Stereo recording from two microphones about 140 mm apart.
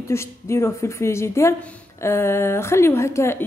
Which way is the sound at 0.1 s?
20° left (ahead or behind).